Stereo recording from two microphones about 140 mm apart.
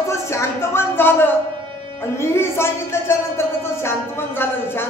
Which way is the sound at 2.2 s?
20° left (ahead or behind).